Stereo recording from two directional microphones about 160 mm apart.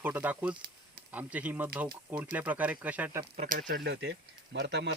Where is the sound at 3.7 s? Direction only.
90° right.